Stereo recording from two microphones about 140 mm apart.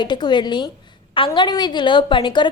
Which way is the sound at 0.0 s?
30° left (ahead or behind).